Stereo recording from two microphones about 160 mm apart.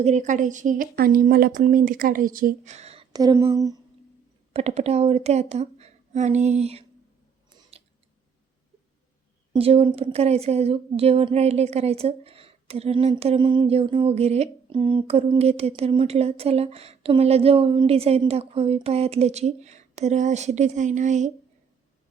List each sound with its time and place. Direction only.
0.0 s a woman's voice: 45° right (ahead or behind); by 2.7 s 60° right (ahead or behind)
2.7 s a sound: 40° right (ahead or behind)
3.1 s speech: 25° right (ahead or behind)
4.5 s speech: 40° right (ahead or behind)
9.5 s a woman's voice: 35° right (ahead or behind)